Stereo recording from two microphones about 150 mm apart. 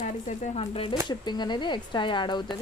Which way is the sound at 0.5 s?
40° left (ahead or behind).